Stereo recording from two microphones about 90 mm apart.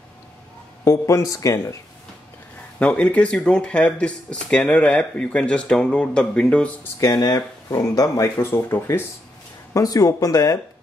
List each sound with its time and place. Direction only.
0.8 s speech: 35° left (ahead or behind)
2.8 s speech: 15° left (ahead or behind)
7.0 s speech: 45° left (ahead or behind)
8.4 s speech: 25° left (ahead or behind)
9.8 s speech: 40° left (ahead or behind)